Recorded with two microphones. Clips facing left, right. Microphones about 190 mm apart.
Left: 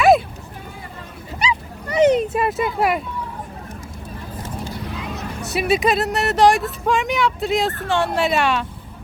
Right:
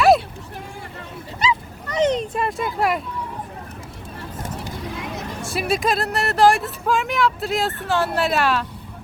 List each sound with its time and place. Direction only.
1.5 s dog: 10° left (ahead or behind)
5.5 s speech: centre (ahead or behind)